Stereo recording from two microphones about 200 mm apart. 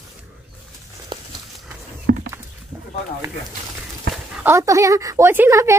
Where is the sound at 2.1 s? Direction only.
55° right (ahead or behind).